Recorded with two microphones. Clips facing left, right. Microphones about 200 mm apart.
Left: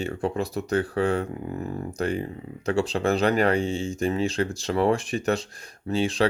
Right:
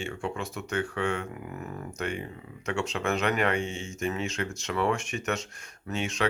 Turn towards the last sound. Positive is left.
turn(degrees=35)  # may be behind; listen again after turning